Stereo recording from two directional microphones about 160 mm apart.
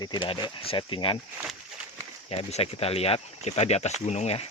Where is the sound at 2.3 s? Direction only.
40° left (ahead or behind).